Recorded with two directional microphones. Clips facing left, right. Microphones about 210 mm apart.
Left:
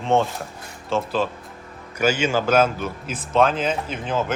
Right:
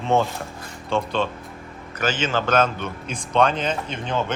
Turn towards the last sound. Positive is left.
turn(degrees=5)  # may be behind; listen again after turning